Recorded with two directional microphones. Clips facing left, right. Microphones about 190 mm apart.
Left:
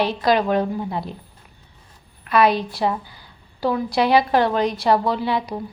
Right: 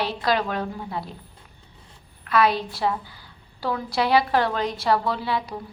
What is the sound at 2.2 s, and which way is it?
A woman's voice, 15° left (ahead or behind).